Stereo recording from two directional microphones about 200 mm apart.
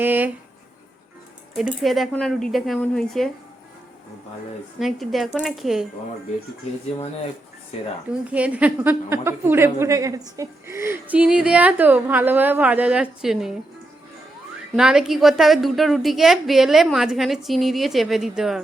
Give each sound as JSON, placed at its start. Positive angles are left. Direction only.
{"t": 0.0, "sound": "a woman's voice", "side_deg": -10}
{"t": 1.5, "sound": "a woman's voice", "side_deg": 0}
{"t": 4.8, "sound": "a woman's voice", "side_deg": 0}
{"t": 6.9, "sound": "speech", "side_deg": 30}
{"t": 8.2, "sound": "a woman's voice", "side_deg": -5}
{"t": 14.8, "sound": "a woman's voice", "side_deg": 0}